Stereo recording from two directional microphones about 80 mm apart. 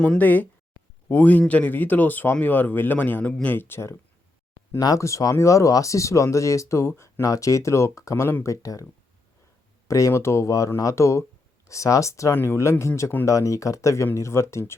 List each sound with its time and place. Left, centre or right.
0.0 s speech: centre
4.8 s speech: left
8.6 s speech: left
9.9 s speech: left